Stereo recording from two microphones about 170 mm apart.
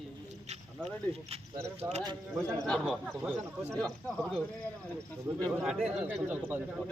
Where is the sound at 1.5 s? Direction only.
15° right (ahead or behind).